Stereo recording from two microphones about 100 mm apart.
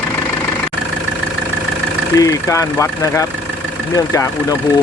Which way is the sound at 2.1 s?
35° left (ahead or behind).